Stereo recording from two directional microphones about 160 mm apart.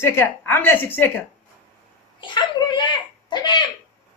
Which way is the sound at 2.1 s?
30° left (ahead or behind).